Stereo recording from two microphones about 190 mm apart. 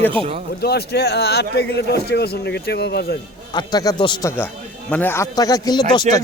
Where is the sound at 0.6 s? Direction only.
55° left (ahead or behind).